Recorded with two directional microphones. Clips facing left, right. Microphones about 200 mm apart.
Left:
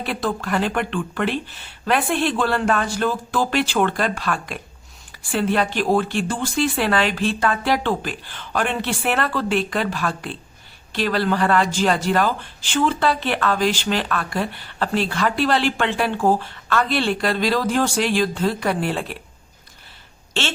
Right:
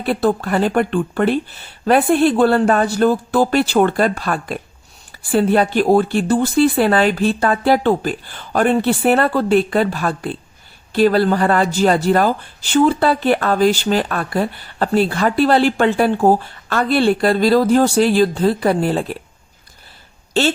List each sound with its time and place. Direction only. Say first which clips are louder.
0.1 s speech: right 8 dB; 40° right (ahead or behind)